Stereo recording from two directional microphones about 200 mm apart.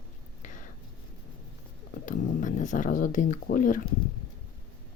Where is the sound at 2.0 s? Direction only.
40° left (ahead or behind).